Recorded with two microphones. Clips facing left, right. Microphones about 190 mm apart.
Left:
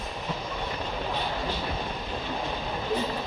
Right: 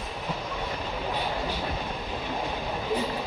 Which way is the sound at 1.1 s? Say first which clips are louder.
Right 2 dB; 10° right (ahead or behind).